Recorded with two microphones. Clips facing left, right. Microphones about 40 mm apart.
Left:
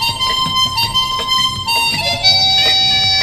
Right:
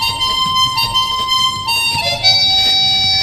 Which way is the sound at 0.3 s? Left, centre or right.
Left.